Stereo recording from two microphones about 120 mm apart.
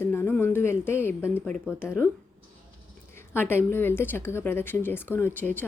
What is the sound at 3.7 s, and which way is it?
Speech, 20° left (ahead or behind).